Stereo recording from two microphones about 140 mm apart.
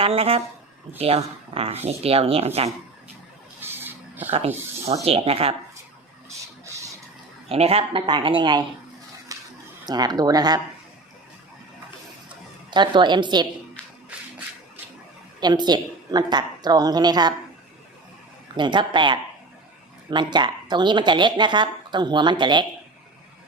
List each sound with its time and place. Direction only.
0.0 s speech: 45° right (ahead or behind)
3.6 s a sound: 15° right (ahead or behind)
4.3 s speech: 45° right (ahead or behind)
7.4 s a woman's voice: 45° right (ahead or behind)
9.3 s a sound: 25° right (ahead or behind)
9.8 s a woman's voice: 30° right (ahead or behind)
12.7 s a woman's voice: 35° right (ahead or behind)
15.4 s a woman's voice: 30° right (ahead or behind)
18.5 s a woman's voice: 35° right (ahead or behind)